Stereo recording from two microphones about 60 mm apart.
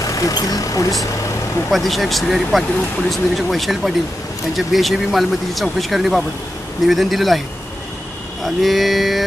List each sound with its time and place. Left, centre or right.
0.0 s speech: left
1.7 s speech: centre
8.6 s speech: centre